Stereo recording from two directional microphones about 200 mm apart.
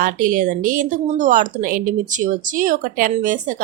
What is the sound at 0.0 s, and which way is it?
A woman's voice, 45° right (ahead or behind).